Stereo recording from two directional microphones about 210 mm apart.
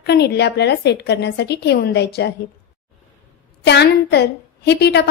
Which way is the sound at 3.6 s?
55° left (ahead or behind).